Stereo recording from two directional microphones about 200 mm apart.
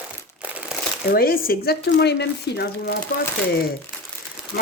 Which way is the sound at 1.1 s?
45° left (ahead or behind).